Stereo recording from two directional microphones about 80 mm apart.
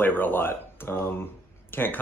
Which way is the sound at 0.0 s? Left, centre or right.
Left.